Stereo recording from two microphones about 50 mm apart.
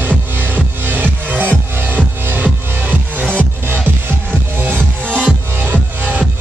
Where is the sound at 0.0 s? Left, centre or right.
Right.